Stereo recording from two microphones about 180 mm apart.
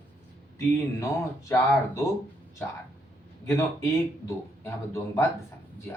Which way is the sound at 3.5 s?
15° left (ahead or behind).